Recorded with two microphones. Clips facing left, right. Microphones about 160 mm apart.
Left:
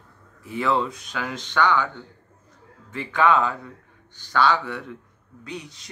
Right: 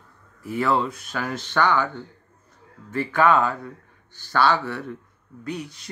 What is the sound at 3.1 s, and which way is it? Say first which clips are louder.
Speech: right 1 dB; 5° right (ahead or behind).